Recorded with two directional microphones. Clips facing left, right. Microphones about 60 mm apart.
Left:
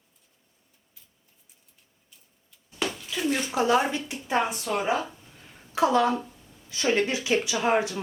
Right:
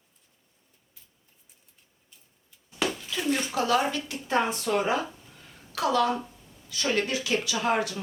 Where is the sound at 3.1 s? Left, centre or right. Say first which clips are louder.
Left 3 dB; centre.